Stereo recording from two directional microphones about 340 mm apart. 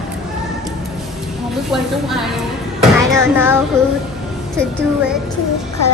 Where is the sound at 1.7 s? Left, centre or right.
Centre.